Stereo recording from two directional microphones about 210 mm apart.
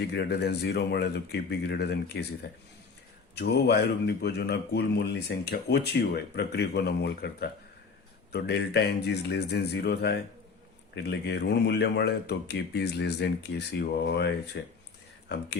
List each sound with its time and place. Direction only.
0.1 s speech: 55° left (ahead or behind)
3.3 s speech: 50° left (ahead or behind)